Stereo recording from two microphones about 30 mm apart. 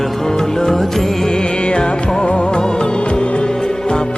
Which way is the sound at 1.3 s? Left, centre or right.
Left.